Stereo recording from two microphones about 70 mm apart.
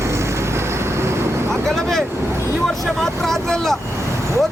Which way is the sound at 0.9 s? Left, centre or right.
Right.